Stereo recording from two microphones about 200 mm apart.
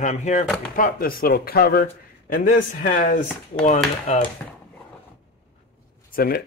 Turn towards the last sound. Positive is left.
turn(degrees=45)  # may be behind; listen again after turning